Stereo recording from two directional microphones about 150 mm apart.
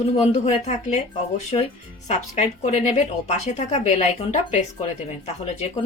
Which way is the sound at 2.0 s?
50° left (ahead or behind).